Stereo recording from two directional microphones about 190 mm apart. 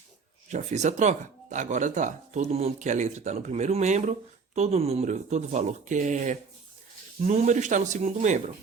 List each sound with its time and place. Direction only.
0.4 s speech: 35° right (ahead or behind)